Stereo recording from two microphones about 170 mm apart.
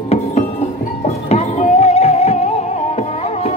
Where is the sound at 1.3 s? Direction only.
40° left (ahead or behind).